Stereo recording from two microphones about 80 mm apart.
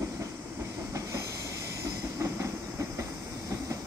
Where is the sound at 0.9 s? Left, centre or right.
Right.